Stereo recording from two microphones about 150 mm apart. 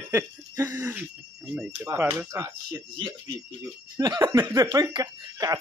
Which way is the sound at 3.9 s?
30° right (ahead or behind).